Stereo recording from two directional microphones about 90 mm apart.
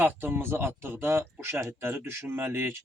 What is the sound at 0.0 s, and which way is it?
Speech, 25° right (ahead or behind).